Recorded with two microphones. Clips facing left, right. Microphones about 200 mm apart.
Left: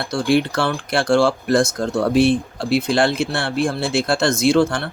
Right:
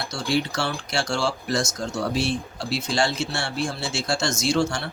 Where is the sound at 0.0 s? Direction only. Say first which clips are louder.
Left 7 dB; 55° left (ahead or behind).